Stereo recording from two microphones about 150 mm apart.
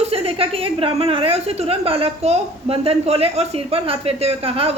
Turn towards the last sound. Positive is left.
turn(degrees=-40)  # may be behind; listen again after turning